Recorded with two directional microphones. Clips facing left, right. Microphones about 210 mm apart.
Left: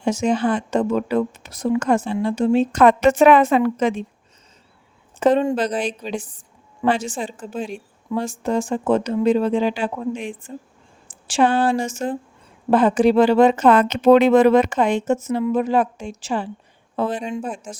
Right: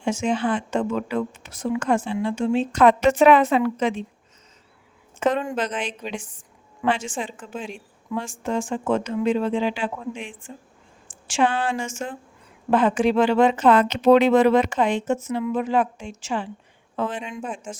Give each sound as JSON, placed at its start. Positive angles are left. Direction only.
{"t": 0.0, "sound": "speech", "side_deg": 40}
{"t": 5.2, "sound": "speech", "side_deg": 30}